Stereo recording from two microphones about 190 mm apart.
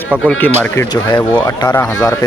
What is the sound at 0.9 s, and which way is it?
Speech, 20° left (ahead or behind).